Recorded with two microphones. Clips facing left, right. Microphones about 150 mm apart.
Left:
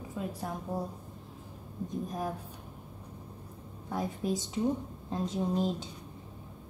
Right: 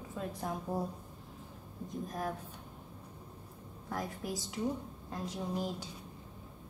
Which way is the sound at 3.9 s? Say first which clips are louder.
Left 6 dB; 20° left (ahead or behind).